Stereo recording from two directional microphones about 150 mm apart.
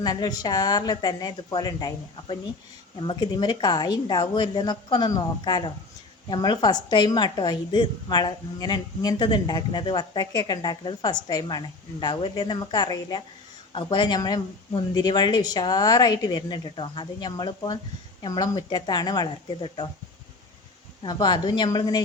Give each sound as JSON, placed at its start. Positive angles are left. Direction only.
{"t": 0.0, "sound": "a woman's voice", "side_deg": 25}
{"t": 21.0, "sound": "a woman's voice", "side_deg": 30}